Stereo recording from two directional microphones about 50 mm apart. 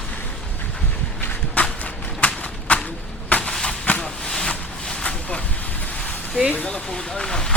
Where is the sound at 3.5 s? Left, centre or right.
Centre.